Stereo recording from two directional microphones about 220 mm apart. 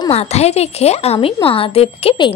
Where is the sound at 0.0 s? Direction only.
30° left (ahead or behind).